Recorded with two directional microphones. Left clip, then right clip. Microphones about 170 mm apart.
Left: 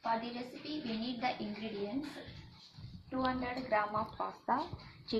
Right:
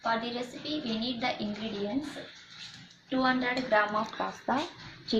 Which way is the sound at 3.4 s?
20° right (ahead or behind).